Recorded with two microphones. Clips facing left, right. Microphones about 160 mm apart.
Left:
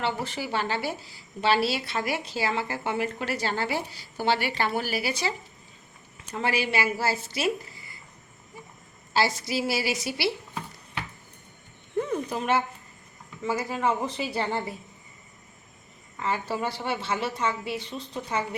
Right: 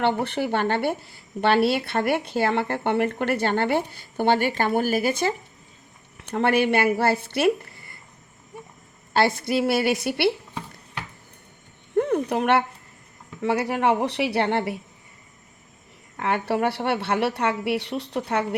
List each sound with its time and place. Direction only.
0.0 s a woman's voice: 60° right (ahead or behind)
6.1 s speech: 60° right (ahead or behind)
9.1 s a woman's voice: 55° right (ahead or behind)
11.9 s a sound: 65° right (ahead or behind)
13.4 s a woman's voice: 70° right (ahead or behind)
16.1 s a woman's voice: 65° right (ahead or behind)